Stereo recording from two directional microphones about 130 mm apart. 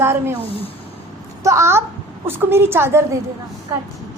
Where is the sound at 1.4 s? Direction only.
20° right (ahead or behind).